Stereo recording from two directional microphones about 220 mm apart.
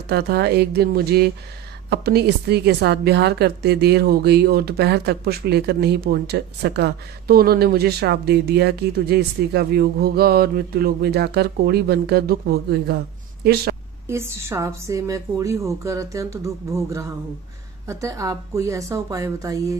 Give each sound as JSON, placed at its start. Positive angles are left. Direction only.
{"t": 0.1, "sound": "a woman's voice", "side_deg": -50}
{"t": 14.0, "sound": "a woman's voice", "side_deg": -10}